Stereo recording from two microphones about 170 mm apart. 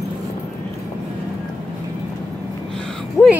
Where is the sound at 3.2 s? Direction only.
15° left (ahead or behind).